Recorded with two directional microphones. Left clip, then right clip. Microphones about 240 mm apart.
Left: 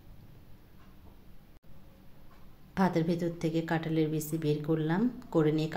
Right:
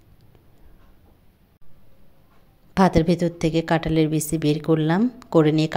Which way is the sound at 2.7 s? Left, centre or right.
Right.